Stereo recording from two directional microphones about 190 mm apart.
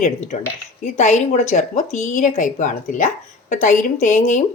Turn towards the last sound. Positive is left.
turn(degrees=40)  # may be behind; listen again after turning